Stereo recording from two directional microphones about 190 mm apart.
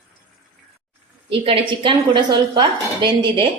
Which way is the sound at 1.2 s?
30° right (ahead or behind).